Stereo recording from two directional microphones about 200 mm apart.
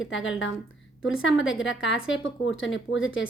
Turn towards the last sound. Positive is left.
turn(degrees=75)  # may be behind; listen again after turning